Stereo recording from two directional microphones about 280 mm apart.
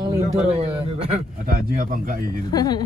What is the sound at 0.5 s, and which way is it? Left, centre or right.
A man's voice, right.